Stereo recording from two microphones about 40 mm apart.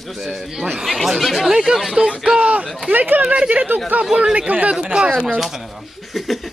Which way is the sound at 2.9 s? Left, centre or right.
Right.